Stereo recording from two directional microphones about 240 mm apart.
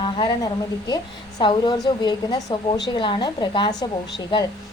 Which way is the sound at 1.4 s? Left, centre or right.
Centre.